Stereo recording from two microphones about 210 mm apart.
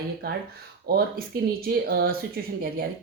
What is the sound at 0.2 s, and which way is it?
Speech, 45° right (ahead or behind).